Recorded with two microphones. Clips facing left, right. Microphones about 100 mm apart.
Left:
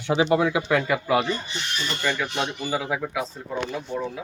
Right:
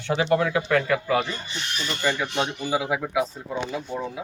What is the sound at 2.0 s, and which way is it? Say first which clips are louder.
Speech: right 2 dB; 10° right (ahead or behind).